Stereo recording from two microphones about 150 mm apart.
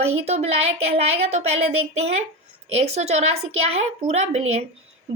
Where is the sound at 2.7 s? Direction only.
45° right (ahead or behind).